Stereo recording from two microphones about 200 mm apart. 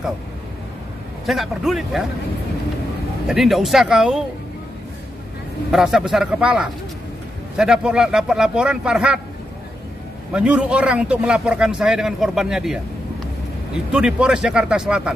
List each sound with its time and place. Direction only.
1.2 s a man's voice: centre (ahead or behind)
3.3 s a man's voice: centre (ahead or behind)
5.7 s a man's voice: centre (ahead or behind)
10.3 s a man's voice: 5° right (ahead or behind)